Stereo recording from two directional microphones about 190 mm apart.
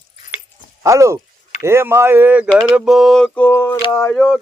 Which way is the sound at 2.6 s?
5° right (ahead or behind).